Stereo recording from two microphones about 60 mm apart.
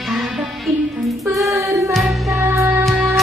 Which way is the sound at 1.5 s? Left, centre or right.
Right.